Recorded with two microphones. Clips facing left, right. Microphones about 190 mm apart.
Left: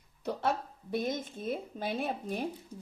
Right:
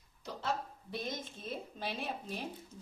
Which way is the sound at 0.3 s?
55° left (ahead or behind).